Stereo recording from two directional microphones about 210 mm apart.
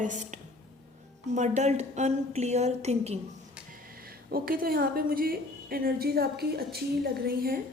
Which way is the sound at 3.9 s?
45° right (ahead or behind).